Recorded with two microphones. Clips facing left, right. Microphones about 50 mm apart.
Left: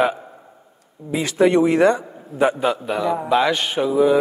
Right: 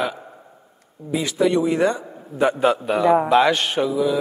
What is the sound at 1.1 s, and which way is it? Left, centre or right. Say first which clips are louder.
Speech: left 3 dB; left.